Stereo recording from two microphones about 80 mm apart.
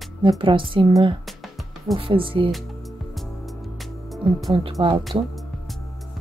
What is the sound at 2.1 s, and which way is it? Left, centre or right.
Speech, right.